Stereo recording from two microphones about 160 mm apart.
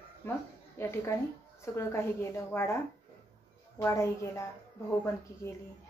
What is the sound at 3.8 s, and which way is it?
Speech, 15° left (ahead or behind).